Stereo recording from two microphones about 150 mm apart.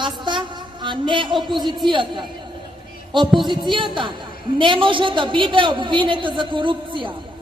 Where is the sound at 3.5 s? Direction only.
30° right (ahead or behind).